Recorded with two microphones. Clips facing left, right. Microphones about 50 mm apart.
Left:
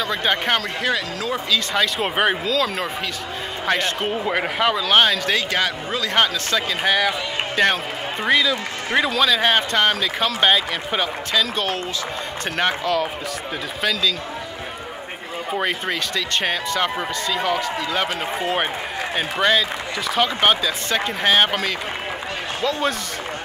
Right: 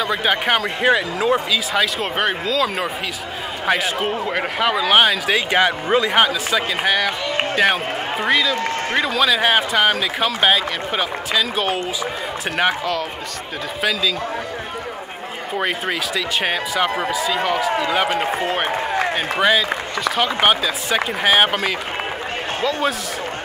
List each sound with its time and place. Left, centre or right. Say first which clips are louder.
0.0 s speech: right 2 dB; centre
0.8 s speech: right 6 dB; centre
1.7 s a man's voice: right 2 dB; centre
2.1 s speech: left 2 dB; centre
2.5 s a man's voice: right 2 dB; centre
4.7 s speech: right 4 dB; centre
5.5 s speech: right 6 dB; right
6.1 s a man's voice: right 3 dB; centre
15.5 s a man's voice: right 1 dB; centre
18.4 s a man's voice: right 1 dB; centre
20.3 s a man's voice: right 1 dB; centre